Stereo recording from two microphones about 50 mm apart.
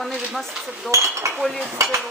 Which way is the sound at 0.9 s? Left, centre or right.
Right.